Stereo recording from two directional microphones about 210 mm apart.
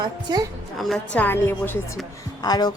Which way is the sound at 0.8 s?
Centre (ahead or behind).